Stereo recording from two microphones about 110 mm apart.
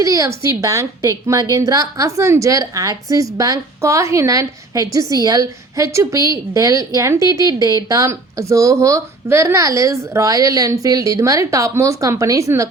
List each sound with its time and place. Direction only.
0.0 s a woman's voice: 30° right (ahead or behind)